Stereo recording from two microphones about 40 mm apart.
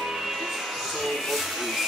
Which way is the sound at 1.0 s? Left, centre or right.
Centre.